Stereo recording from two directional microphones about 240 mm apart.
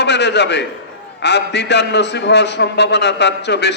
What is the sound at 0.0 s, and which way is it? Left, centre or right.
A man's voice, left.